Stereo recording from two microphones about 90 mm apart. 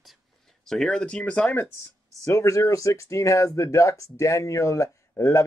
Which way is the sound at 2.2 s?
35° left (ahead or behind).